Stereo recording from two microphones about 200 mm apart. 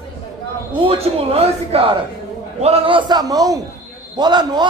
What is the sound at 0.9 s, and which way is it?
A man's voice, 30° right (ahead or behind).